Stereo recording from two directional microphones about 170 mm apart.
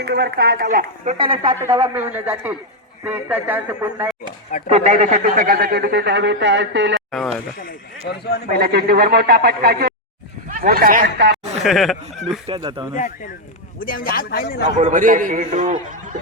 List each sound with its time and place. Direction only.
0.0 s a man's voice: 70° right (ahead or behind); by 1.1 s 55° right (ahead or behind)
1.2 s speech: 30° right (ahead or behind)
1.5 s a man's voice: 15° right (ahead or behind)
4.7 s a man's voice: 40° right (ahead or behind); by 7.0 s 90° right
7.1 s speech: centre (ahead or behind)
7.6 s speech: 70° left (ahead or behind)
8.5 s a man's voice: 65° right (ahead or behind); by 11.3 s 80° right
11.6 s speech: centre (ahead or behind)
12.5 s speech: 30° right (ahead or behind)
13.7 s speech: 55° left (ahead or behind)
14.8 s a man's voice: 50° right (ahead or behind)